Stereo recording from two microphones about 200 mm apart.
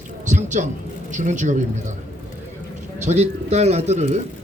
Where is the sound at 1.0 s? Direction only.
40° right (ahead or behind).